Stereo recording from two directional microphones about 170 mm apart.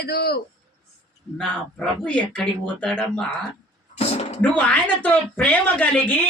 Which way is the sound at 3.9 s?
35° left (ahead or behind).